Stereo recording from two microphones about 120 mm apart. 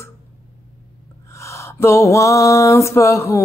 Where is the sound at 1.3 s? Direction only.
25° left (ahead or behind).